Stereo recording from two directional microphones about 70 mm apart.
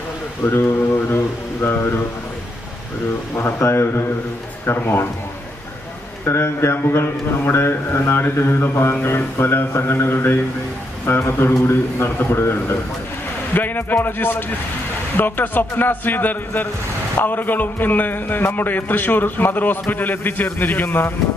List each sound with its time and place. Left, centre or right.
0.4 s speech: left
3.3 s speech: left
6.2 s speech: left
13.5 s a man's voice: left